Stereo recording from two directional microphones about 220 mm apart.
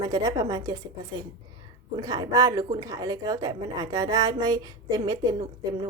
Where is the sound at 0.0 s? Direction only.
20° right (ahead or behind).